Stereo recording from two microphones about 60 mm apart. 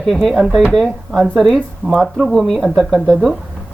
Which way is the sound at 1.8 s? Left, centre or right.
Right.